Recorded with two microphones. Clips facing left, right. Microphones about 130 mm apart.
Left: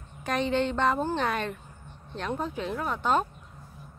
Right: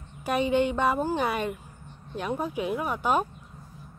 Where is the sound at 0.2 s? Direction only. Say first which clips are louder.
Right 3 dB; 10° right (ahead or behind).